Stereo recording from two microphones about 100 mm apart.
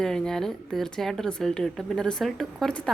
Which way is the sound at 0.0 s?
5° left (ahead or behind).